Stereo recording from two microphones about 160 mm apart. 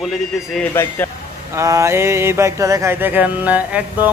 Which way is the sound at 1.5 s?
20° right (ahead or behind).